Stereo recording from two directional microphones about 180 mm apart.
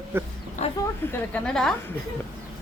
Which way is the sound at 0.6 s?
40° left (ahead or behind).